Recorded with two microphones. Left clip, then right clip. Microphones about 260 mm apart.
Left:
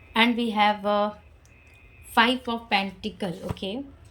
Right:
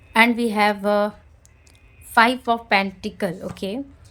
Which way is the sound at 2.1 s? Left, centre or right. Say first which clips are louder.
Right 5 dB; centre.